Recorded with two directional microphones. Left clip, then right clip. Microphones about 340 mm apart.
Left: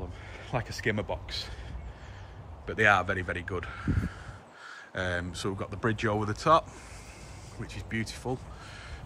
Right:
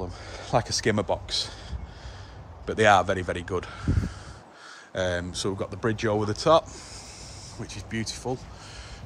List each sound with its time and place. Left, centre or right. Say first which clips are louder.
0.3 s speech: right 10 dB; centre
2.6 s speech: right 4 dB; centre